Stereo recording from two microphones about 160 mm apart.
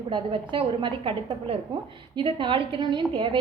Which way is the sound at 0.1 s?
35° right (ahead or behind).